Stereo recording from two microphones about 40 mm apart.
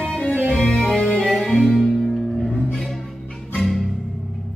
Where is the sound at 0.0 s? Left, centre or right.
Left.